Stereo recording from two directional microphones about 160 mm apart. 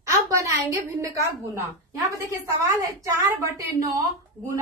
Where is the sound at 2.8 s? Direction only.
20° right (ahead or behind).